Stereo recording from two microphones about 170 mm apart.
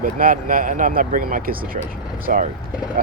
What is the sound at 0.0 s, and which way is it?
Speech, 55° right (ahead or behind).